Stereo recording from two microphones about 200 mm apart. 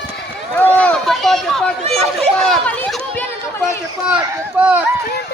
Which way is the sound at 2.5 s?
Centre (ahead or behind).